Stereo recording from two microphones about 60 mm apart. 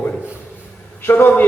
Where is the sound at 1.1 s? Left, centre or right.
Left.